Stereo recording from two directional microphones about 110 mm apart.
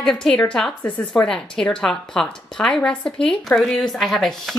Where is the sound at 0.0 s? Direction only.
5° left (ahead or behind).